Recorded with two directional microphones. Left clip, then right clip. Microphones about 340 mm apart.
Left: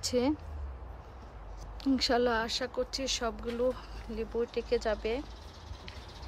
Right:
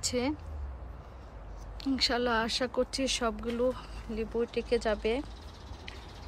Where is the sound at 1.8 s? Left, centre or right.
Centre.